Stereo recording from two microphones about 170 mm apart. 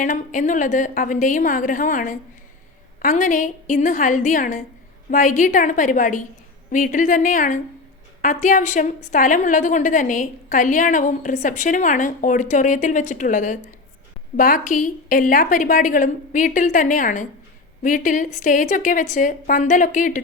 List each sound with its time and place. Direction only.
0.0 s a woman's voice: 50° left (ahead or behind)